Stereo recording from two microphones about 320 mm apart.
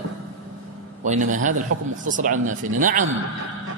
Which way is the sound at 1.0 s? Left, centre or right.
Right.